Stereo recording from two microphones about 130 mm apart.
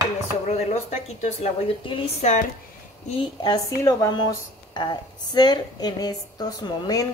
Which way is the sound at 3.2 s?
35° left (ahead or behind).